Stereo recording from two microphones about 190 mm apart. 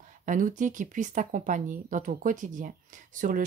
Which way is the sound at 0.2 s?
45° right (ahead or behind).